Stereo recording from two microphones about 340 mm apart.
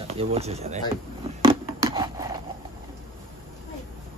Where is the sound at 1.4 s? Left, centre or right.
Centre.